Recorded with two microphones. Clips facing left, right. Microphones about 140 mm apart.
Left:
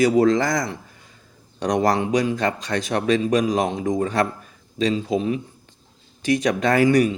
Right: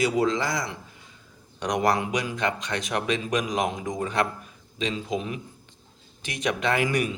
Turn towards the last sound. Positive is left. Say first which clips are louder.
# left 8 dB
turn(degrees=35)  # may be behind; listen again after turning